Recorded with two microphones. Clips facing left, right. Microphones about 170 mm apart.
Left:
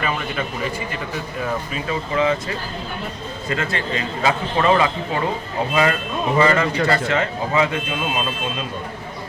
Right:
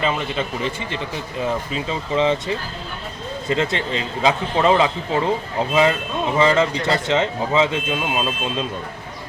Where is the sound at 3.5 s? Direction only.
20° right (ahead or behind).